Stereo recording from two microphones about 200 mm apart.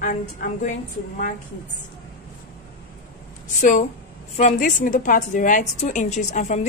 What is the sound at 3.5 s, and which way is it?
A woman's voice, 35° left (ahead or behind).